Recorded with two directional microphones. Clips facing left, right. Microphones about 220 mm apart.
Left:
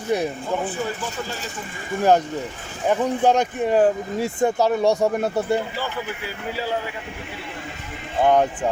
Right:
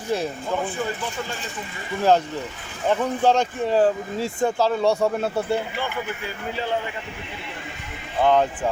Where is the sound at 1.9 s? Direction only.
50° left (ahead or behind).